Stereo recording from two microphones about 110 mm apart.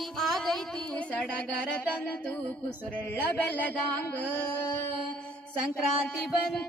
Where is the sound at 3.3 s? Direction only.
15° left (ahead or behind).